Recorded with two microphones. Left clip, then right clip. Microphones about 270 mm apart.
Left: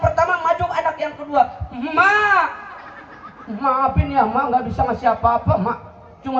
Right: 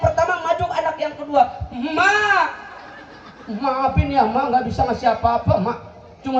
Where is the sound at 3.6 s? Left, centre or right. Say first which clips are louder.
Left 2 dB; right.